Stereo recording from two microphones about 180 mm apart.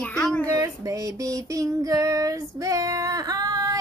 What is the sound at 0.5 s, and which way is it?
Female singing, 20° right (ahead or behind).